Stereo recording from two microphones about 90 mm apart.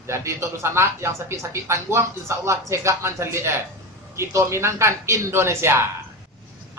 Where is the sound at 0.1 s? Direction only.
30° right (ahead or behind).